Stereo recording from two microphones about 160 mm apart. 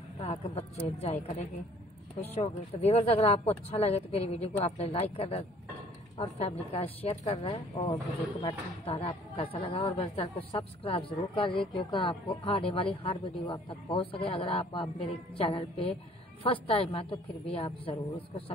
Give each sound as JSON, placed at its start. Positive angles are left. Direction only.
{"t": 0.2, "sound": "a woman's voice", "side_deg": 40}